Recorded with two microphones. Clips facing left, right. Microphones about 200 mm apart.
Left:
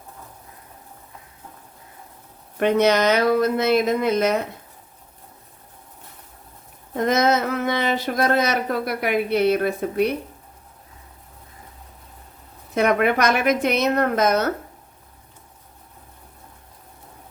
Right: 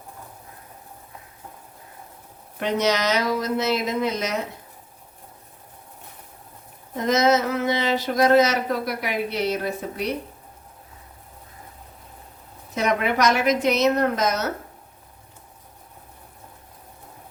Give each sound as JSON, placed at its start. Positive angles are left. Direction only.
{"t": 2.6, "sound": "speech", "side_deg": 55}
{"t": 6.9, "sound": "speech", "side_deg": 55}
{"t": 12.7, "sound": "speech", "side_deg": 55}